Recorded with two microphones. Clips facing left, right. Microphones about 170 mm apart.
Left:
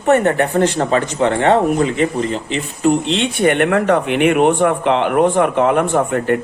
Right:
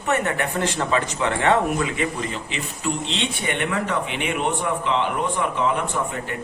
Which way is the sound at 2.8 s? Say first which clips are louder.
Left 11 dB; 55° left (ahead or behind).